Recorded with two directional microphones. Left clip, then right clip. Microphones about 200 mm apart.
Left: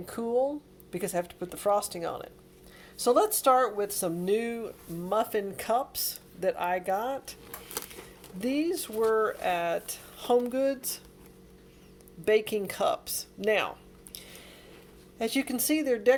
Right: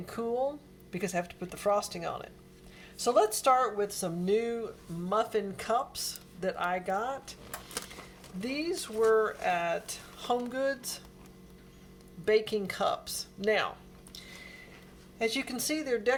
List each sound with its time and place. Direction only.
0.0 s speech: 25° left (ahead or behind)
8.4 s speech: 35° left (ahead or behind)
12.2 s speech: 35° left (ahead or behind)
15.2 s speech: 35° left (ahead or behind)